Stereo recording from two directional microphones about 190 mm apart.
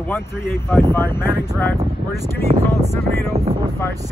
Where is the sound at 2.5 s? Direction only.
35° right (ahead or behind).